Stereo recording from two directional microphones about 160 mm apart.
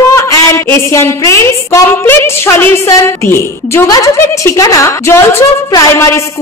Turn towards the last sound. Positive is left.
turn(degrees=15)  # may be behind; listen again after turning